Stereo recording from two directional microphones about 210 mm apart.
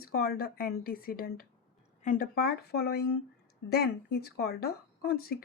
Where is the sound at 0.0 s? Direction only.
45° left (ahead or behind).